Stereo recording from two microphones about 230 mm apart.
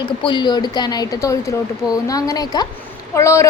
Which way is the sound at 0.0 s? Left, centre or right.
Centre.